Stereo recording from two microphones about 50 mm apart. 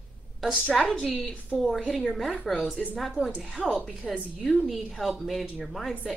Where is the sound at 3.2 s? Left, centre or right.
Right.